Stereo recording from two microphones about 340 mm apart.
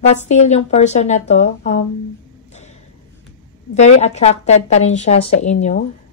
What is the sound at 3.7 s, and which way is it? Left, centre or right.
A woman's voice, centre.